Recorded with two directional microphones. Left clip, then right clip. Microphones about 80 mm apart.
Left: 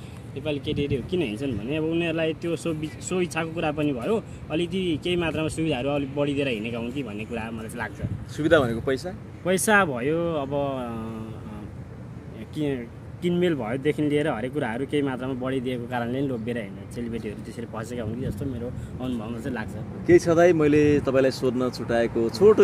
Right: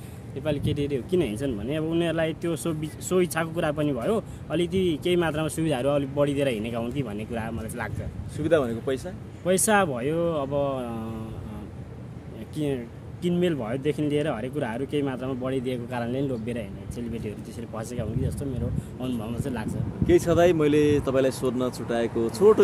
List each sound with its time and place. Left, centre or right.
0.4 s speech: right
6.8 s speech: right
9.4 s speech: centre
10.3 s speech: right
12.5 s speech: right
13.2 s speech: centre
16.9 s speech: centre
18.9 s speech: right
20.1 s speech: left